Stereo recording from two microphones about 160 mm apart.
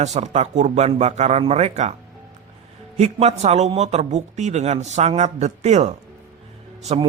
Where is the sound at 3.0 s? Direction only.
45° right (ahead or behind).